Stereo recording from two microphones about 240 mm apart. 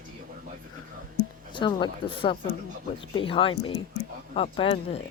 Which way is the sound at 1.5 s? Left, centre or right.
Centre.